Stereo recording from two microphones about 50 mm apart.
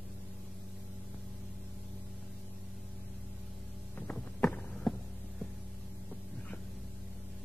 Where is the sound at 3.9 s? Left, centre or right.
Left.